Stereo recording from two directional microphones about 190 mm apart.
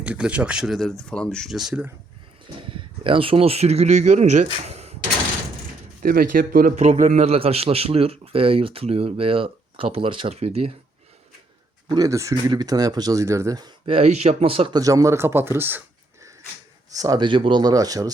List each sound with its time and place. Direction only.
0.0 s speech: 5° right (ahead or behind)
2.6 s speech: 25° right (ahead or behind)
6.0 s speech: 50° right (ahead or behind)
6.7 s a man's voice: 35° right (ahead or behind)
11.9 s speech: 20° right (ahead or behind)
14.8 s speech: 20° right (ahead or behind)
16.9 s speech: 20° right (ahead or behind)